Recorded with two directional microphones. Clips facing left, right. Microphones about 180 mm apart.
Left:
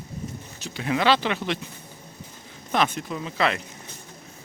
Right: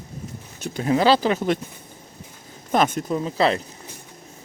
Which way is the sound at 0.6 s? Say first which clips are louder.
Right 5 dB; 45° right (ahead or behind).